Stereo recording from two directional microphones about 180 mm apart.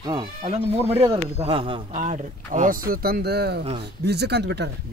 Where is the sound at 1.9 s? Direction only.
45° right (ahead or behind).